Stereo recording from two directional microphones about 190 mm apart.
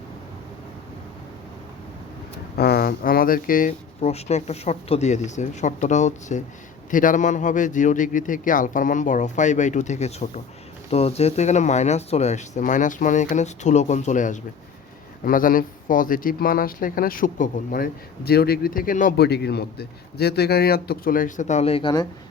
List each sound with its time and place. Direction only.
2.6 s speech: 55° left (ahead or behind); by 22.0 s 25° left (ahead or behind)